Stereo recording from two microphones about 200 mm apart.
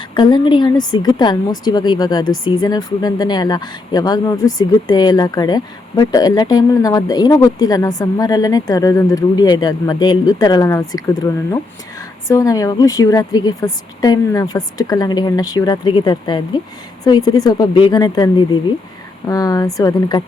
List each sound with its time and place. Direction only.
0.1 s a woman's voice: 20° left (ahead or behind)